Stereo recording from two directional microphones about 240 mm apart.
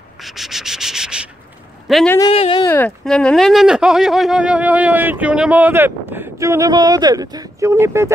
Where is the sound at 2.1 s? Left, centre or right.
Left.